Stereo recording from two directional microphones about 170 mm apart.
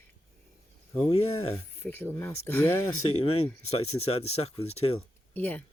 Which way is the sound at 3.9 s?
35° left (ahead or behind).